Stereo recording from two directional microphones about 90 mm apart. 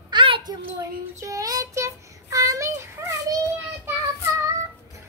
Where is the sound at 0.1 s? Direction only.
75° right (ahead or behind).